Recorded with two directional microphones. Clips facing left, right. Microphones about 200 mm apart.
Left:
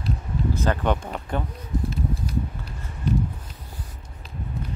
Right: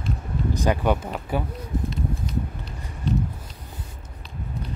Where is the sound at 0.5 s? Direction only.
15° right (ahead or behind).